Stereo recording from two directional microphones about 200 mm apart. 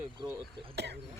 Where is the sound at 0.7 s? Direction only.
55° right (ahead or behind).